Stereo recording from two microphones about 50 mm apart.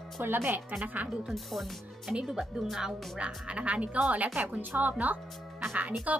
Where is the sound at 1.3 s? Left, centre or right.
Centre.